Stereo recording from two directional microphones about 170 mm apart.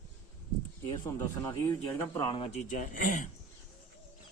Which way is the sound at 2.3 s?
35° left (ahead or behind).